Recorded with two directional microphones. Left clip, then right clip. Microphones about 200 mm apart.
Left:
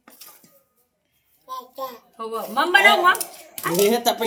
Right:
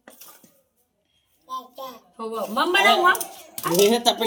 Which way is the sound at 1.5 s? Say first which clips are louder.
Left 2 dB; 30° left (ahead or behind).